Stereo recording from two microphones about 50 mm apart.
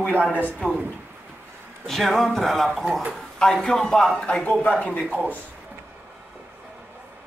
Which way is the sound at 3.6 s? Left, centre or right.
Centre.